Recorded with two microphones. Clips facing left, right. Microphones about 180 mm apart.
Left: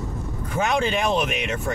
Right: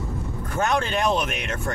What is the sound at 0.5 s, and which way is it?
Speech, 5° left (ahead or behind).